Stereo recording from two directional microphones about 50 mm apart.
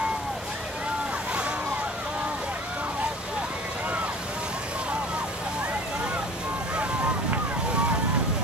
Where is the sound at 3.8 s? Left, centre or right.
Right.